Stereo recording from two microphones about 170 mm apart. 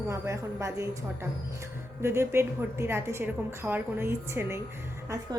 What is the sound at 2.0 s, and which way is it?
A woman's voice, 15° right (ahead or behind).